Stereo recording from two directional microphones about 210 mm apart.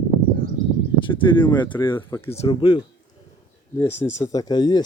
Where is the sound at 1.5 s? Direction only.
20° left (ahead or behind).